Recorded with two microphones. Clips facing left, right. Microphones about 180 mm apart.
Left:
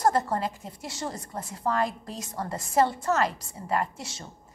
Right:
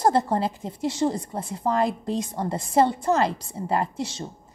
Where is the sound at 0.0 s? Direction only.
25° right (ahead or behind).